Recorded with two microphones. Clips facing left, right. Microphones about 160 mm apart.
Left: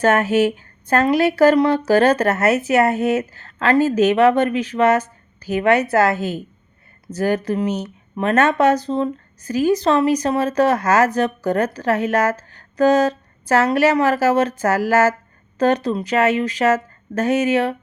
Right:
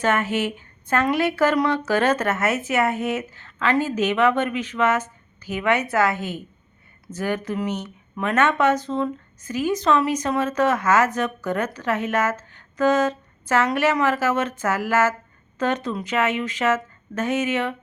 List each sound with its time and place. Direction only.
0.0 s speech: 40° left (ahead or behind)